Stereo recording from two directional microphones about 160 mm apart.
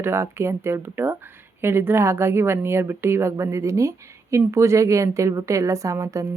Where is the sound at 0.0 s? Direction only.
15° right (ahead or behind).